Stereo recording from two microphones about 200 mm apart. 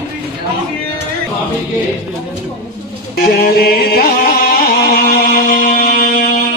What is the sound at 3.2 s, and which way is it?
Music, 50° left (ahead or behind).